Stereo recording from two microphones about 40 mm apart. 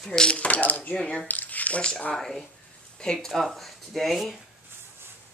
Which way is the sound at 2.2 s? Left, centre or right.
Centre.